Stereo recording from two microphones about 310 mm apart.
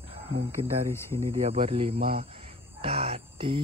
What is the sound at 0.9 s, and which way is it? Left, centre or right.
Speech, centre.